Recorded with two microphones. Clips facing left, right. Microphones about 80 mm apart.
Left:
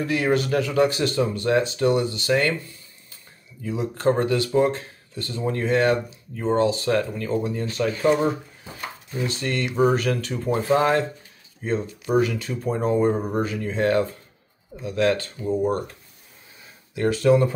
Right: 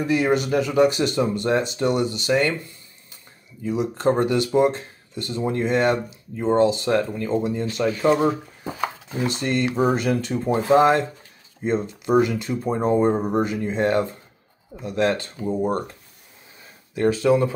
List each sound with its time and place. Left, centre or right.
0.0 s speech: centre
3.6 s speech: right
17.0 s speech: centre